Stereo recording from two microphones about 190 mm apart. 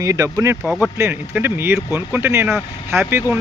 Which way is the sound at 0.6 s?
5° right (ahead or behind).